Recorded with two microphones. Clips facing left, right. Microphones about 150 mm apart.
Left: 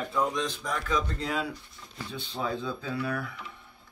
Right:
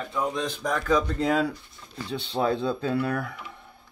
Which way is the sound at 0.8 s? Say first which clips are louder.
Right 8 dB; 40° right (ahead or behind).